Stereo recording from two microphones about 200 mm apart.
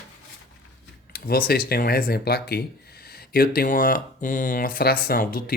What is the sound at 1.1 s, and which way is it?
Speech, 50° left (ahead or behind).